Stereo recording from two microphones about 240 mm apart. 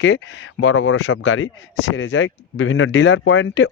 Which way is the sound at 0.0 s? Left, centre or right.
Left.